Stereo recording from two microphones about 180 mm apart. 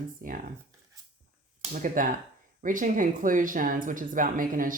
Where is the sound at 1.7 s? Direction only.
50° right (ahead or behind).